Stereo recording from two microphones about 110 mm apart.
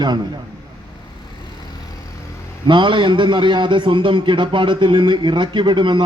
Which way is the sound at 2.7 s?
45° right (ahead or behind).